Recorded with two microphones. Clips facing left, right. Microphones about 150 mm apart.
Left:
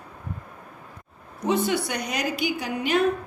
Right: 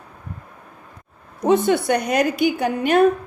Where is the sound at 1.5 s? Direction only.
50° right (ahead or behind).